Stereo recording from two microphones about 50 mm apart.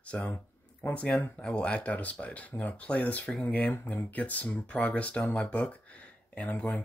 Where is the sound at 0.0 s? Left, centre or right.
Left.